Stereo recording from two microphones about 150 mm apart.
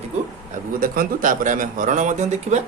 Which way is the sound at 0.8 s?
75° right (ahead or behind).